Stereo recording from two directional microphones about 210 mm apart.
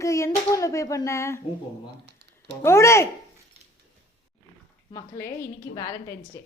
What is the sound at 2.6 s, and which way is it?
Speech, 15° left (ahead or behind).